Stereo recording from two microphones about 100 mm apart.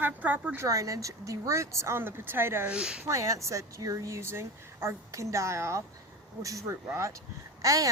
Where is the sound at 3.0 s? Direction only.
30° right (ahead or behind).